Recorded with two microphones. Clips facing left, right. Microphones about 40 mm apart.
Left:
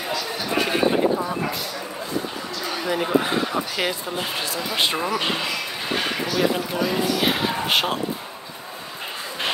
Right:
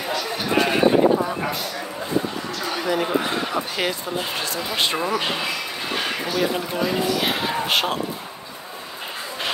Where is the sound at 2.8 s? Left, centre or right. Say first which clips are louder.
Left 1 dB; centre.